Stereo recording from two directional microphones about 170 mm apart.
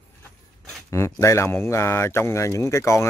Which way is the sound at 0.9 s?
15° left (ahead or behind).